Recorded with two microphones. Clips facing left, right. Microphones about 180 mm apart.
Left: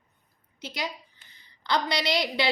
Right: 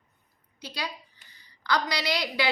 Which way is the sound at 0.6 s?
20° left (ahead or behind).